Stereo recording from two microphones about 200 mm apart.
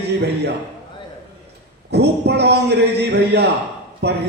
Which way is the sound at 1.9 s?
55° right (ahead or behind).